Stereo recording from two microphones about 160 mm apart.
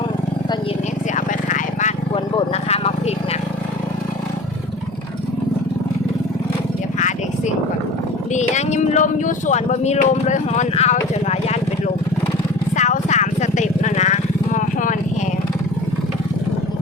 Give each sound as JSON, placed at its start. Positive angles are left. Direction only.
{"t": 1.1, "sound": "vehicle", "side_deg": 50}
{"t": 2.6, "sound": "vehicle", "side_deg": 40}
{"t": 8.3, "sound": "speech", "side_deg": 45}
{"t": 12.7, "sound": "vehicle", "side_deg": 50}